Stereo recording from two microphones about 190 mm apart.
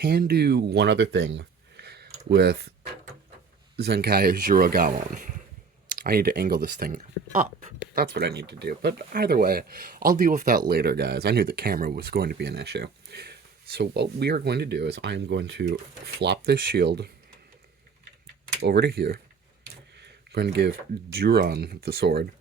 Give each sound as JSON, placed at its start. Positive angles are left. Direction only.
{"t": 0.0, "sound": "speech", "side_deg": -55}
{"t": 3.8, "sound": "speech", "side_deg": -55}
{"t": 15.6, "sound": "speech", "side_deg": -50}
{"t": 18.6, "sound": "speech", "side_deg": -60}